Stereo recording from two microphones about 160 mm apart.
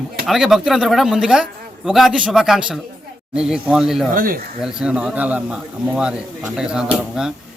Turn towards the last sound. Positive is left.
turn(degrees=-5)  # may be behind; listen again after turning